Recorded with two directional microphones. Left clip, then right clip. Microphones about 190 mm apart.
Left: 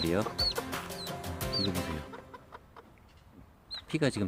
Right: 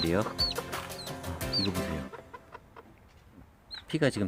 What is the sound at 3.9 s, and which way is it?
Speech, 10° right (ahead or behind).